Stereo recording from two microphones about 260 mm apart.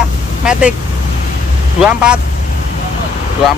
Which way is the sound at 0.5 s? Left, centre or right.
Centre.